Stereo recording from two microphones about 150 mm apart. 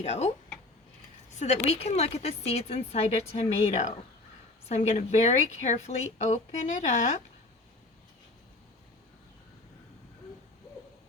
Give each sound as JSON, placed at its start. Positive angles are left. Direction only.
{"t": 0.0, "sound": "speech", "side_deg": 45}
{"t": 1.4, "sound": "speech", "side_deg": 45}